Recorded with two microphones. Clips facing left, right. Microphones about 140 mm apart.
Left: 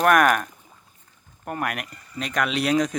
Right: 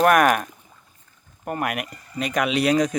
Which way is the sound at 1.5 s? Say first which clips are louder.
Right 2 dB; 5° right (ahead or behind).